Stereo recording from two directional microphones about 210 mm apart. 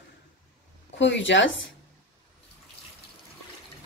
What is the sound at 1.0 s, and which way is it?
Speech, 60° left (ahead or behind).